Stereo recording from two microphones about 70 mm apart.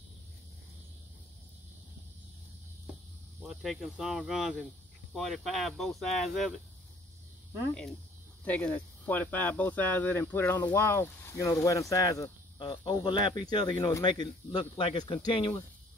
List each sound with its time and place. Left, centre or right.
3.4 s cricket: centre
4.0 s speech: centre
8.5 s speech: left
11.3 s speech: left
12.6 s speech: left